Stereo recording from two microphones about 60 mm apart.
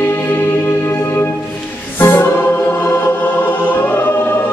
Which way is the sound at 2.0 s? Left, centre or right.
Left.